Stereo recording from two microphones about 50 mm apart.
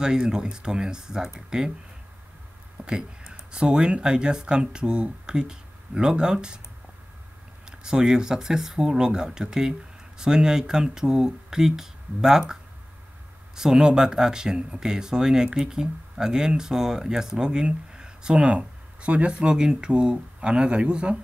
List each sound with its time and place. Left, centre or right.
0.0 s speech: centre
2.8 s speech: centre
7.8 s speech: centre
13.6 s speech: centre